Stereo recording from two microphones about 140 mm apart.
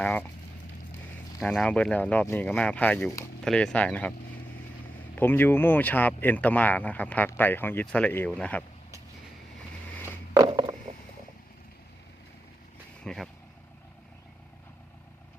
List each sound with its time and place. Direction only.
0.0 s speech: 10° left (ahead or behind)
1.4 s speech: 5° left (ahead or behind)
5.1 s speech: 15° left (ahead or behind)
10.3 s a sound: 25° right (ahead or behind)
13.1 s vehicle: 5° left (ahead or behind)